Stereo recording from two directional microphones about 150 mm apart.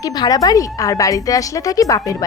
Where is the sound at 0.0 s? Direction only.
25° left (ahead or behind).